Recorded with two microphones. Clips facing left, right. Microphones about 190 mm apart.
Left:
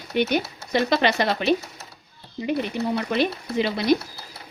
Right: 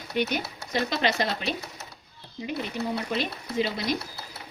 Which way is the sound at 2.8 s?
65° left (ahead or behind).